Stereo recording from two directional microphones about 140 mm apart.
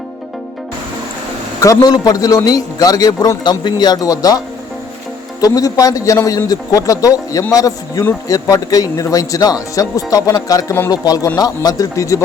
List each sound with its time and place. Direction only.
1.6 s speech: 25° left (ahead or behind)